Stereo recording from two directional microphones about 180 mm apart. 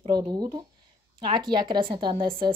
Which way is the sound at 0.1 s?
20° right (ahead or behind).